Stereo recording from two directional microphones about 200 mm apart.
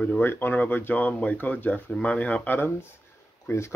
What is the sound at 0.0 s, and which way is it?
Speech, 10° left (ahead or behind).